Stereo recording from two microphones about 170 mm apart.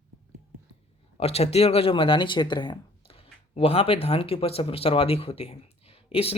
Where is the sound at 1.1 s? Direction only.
35° left (ahead or behind).